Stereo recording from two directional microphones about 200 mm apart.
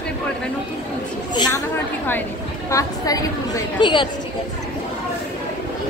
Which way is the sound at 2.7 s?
15° left (ahead or behind).